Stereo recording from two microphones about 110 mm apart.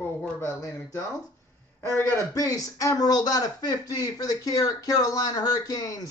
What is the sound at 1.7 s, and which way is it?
Speech, 20° left (ahead or behind).